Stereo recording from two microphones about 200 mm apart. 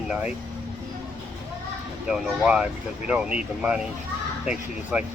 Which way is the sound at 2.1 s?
5° right (ahead or behind).